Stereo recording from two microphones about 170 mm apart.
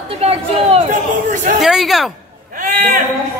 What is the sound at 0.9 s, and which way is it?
Speech, 50° right (ahead or behind).